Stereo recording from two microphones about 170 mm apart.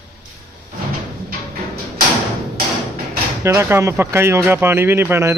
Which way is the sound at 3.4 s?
15° right (ahead or behind).